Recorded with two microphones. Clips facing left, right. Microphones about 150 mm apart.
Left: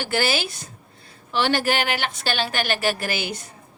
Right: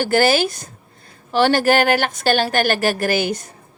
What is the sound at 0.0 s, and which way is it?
Speech, 45° right (ahead or behind).